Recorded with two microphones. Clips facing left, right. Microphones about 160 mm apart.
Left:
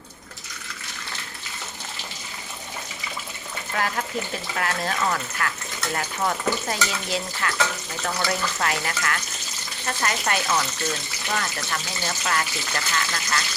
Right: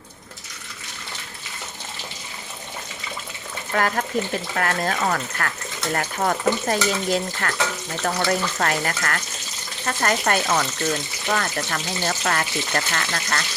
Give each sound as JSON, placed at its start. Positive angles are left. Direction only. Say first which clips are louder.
{"t": 3.8, "sound": "speech", "louder": "right 5 dB", "side_deg": -50}